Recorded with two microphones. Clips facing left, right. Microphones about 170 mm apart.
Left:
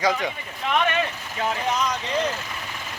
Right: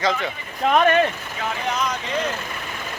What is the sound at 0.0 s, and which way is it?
Speech, 10° left (ahead or behind).